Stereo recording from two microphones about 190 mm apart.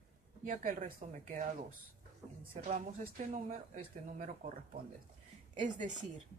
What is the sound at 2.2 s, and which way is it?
Speech, 15° right (ahead or behind).